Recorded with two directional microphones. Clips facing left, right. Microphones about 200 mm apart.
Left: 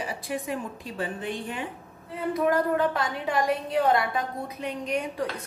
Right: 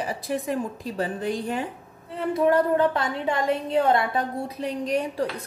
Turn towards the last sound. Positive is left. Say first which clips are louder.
# right 4 dB
turn(degrees=-35)  # may be behind; listen again after turning